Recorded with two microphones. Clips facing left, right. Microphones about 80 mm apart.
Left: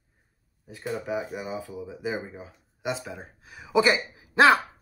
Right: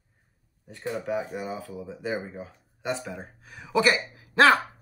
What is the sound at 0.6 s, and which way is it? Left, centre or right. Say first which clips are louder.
Speech: right 1 dB; centre.